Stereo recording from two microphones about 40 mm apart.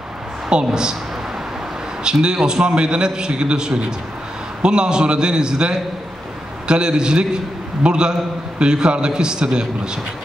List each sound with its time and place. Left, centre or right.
0.7 s a man's voice: centre
2.2 s a man's voice: right